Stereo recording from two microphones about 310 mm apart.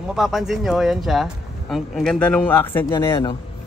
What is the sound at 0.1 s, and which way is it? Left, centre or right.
Speech, centre.